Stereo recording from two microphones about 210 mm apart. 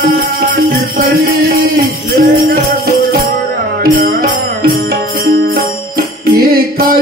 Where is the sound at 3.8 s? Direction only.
45° right (ahead or behind).